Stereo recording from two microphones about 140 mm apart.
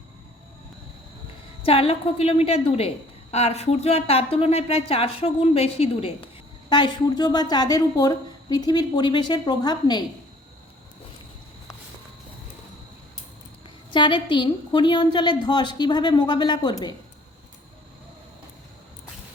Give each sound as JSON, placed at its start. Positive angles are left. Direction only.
{"t": 1.6, "sound": "a woman's voice", "side_deg": 45}
{"t": 6.7, "sound": "a woman's voice", "side_deg": 30}
{"t": 13.9, "sound": "a woman's voice", "side_deg": 35}